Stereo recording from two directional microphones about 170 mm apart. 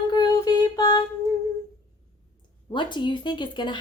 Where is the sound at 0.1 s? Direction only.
25° left (ahead or behind).